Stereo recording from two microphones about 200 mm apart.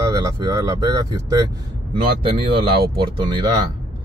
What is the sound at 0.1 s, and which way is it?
Speech, 15° right (ahead or behind).